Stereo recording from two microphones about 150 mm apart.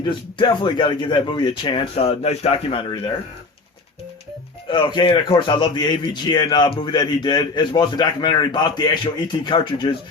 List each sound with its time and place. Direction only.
0.0 s speech: 30° left (ahead or behind)
4.7 s a man's voice: 30° left (ahead or behind)